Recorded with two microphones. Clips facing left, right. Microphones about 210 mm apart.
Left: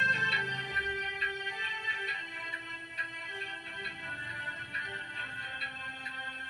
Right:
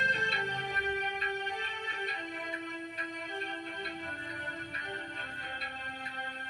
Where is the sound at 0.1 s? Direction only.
50° right (ahead or behind).